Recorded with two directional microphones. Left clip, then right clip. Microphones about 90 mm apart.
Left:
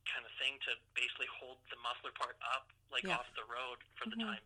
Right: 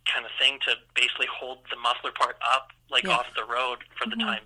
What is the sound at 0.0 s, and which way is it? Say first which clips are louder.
Speech: right 16 dB; 30° right (ahead or behind).